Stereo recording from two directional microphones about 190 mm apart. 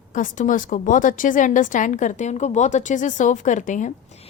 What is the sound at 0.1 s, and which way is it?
Speech, 45° left (ahead or behind).